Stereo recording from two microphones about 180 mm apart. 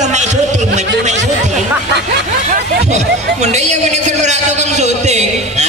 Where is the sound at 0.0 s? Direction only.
40° right (ahead or behind).